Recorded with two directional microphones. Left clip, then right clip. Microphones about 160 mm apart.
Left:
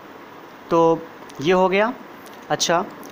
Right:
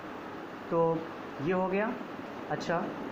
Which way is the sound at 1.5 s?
70° left (ahead or behind).